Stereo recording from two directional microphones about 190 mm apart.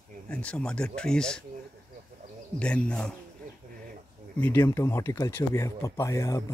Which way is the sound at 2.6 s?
5° left (ahead or behind).